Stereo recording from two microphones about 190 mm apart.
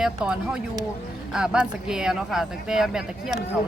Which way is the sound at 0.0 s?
5° right (ahead or behind).